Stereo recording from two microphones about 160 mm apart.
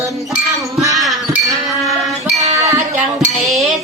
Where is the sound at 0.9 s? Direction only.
Centre (ahead or behind).